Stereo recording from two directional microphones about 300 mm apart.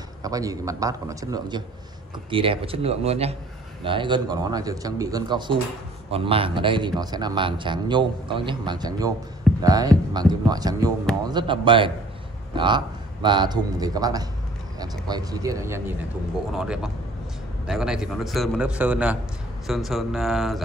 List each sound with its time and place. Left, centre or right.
0.2 s a man's voice: centre